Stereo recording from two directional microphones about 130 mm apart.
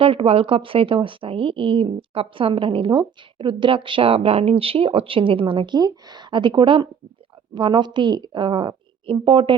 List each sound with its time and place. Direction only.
0.0 s a woman's voice: 45° right (ahead or behind)